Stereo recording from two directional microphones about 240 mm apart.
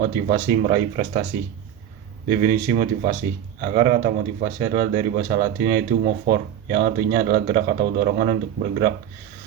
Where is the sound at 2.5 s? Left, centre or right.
Right.